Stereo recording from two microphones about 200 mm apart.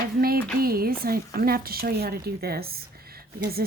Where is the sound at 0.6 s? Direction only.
50° right (ahead or behind).